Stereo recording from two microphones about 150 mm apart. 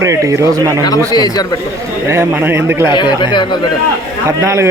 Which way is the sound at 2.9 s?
30° left (ahead or behind).